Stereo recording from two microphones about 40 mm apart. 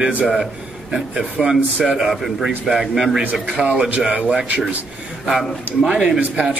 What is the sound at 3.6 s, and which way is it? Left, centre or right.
Speech, right.